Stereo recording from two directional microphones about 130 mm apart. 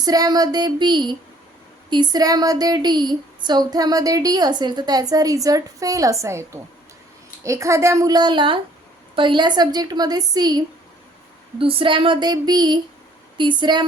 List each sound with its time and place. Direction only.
0.0 s a woman's voice: 30° right (ahead or behind)
11.6 s a woman's voice: 45° right (ahead or behind)